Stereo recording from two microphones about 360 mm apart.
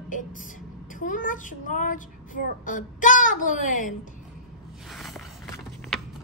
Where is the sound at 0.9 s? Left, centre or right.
Left.